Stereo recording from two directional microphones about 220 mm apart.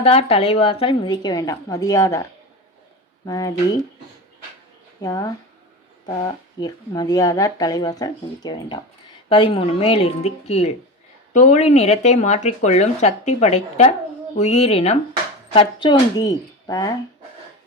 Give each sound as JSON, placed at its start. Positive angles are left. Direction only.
{"t": 0.0, "sound": "a woman's voice", "side_deg": 25}
{"t": 3.2, "sound": "a woman's voice", "side_deg": 15}
{"t": 5.0, "sound": "a woman's voice", "side_deg": 15}